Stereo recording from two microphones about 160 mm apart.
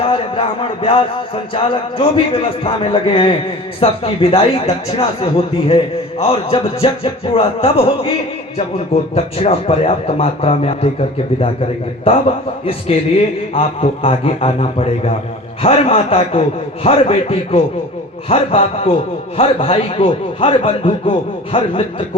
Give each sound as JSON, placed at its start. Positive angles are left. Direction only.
{"t": 0.0, "sound": "music", "side_deg": 30}
{"t": 9.1, "sound": "music", "side_deg": 40}
{"t": 12.1, "sound": "music", "side_deg": 35}